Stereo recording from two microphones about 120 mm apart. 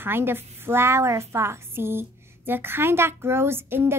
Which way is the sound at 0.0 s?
20° right (ahead or behind).